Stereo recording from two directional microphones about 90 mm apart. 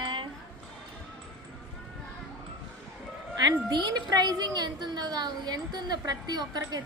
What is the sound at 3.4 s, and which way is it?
A woman's voice, 50° right (ahead or behind).